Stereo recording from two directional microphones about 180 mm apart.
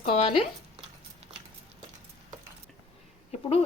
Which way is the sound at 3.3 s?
35° left (ahead or behind).